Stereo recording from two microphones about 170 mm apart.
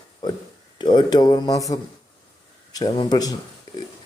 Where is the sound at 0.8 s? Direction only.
25° left (ahead or behind).